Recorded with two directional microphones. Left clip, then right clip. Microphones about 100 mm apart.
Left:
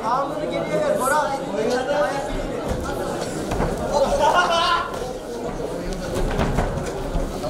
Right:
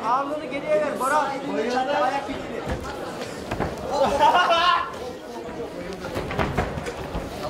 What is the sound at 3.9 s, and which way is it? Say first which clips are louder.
Chatter: even; 25° left (ahead or behind).